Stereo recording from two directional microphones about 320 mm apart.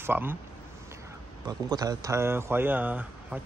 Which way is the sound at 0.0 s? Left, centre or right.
Centre.